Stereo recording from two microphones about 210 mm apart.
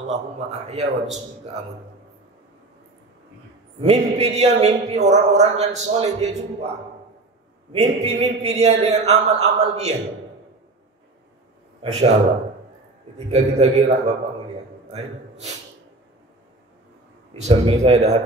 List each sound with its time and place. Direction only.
0.1 s a man's voice: 30° right (ahead or behind)
3.8 s a man's voice: 30° right (ahead or behind)
7.7 s a man's voice: 30° right (ahead or behind)
11.8 s speech: 30° right (ahead or behind)
13.3 s a man's voice: 30° right (ahead or behind)
14.9 s a man's voice: 30° right (ahead or behind)
17.4 s a man's voice: 30° right (ahead or behind)